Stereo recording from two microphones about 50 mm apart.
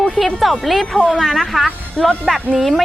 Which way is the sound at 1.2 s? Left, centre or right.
Centre.